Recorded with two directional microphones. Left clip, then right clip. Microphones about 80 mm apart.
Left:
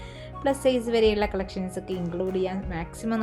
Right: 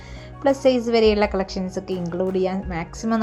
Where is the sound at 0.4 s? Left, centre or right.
Right.